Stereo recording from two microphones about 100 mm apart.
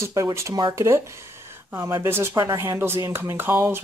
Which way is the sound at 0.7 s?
30° right (ahead or behind).